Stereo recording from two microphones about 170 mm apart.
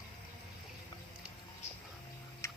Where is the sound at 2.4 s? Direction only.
15° left (ahead or behind).